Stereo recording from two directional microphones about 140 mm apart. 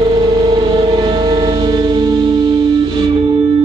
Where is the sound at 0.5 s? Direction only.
30° right (ahead or behind).